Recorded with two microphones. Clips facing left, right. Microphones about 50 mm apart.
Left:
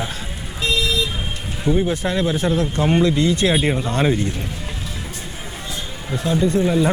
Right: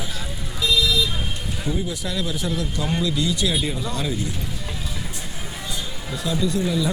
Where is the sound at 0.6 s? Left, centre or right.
Left.